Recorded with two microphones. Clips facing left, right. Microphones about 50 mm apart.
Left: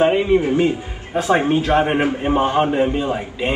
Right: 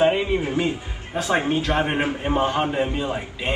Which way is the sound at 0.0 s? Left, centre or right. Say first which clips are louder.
Left 5 dB; centre.